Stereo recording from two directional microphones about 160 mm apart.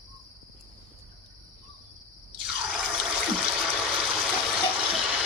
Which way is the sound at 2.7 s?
5° right (ahead or behind).